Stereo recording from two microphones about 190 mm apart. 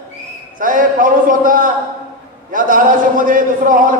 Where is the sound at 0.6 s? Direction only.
45° right (ahead or behind).